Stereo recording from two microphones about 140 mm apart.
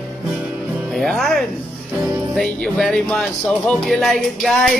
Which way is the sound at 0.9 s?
Centre (ahead or behind).